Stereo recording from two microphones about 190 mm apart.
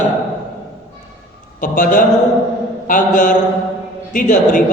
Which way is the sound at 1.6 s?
45° left (ahead or behind).